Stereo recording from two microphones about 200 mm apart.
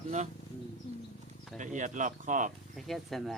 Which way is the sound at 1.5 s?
40° right (ahead or behind).